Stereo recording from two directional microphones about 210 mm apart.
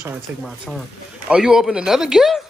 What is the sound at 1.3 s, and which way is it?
Speech, 5° right (ahead or behind).